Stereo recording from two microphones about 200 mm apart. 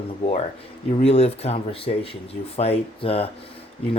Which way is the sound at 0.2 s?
30° left (ahead or behind).